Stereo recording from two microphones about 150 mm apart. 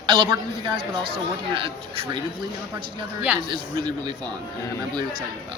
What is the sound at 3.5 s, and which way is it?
Speech, 30° right (ahead or behind).